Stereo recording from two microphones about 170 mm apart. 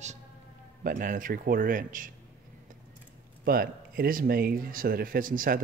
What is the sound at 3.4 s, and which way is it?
Speech, 60° right (ahead or behind).